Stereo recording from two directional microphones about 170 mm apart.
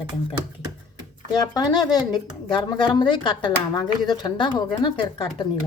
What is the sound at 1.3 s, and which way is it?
A woman's voice, 25° left (ahead or behind).